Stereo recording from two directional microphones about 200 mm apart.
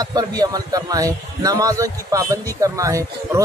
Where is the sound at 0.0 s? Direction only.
20° right (ahead or behind).